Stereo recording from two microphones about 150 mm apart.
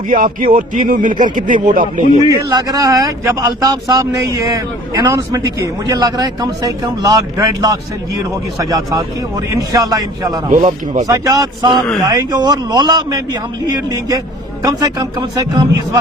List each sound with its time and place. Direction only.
0.1 s speech: 65° right (ahead or behind)
2.5 s speech: 25° right (ahead or behind)
10.5 s speech: 55° right (ahead or behind)
11.0 s speech: 25° right (ahead or behind)
14.6 s speech: 25° right (ahead or behind)